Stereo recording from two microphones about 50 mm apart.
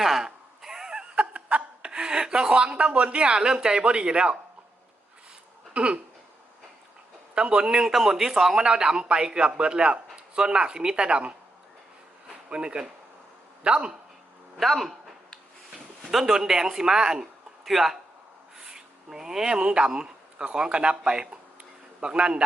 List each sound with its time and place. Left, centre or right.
0.0 s snicker: centre
5.7 s a sound: right
7.3 s a man's voice: right
12.5 s speech: centre
14.6 s speech: centre
16.1 s a man's voice: centre